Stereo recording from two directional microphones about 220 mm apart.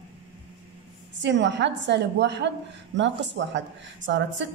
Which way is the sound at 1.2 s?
55° right (ahead or behind).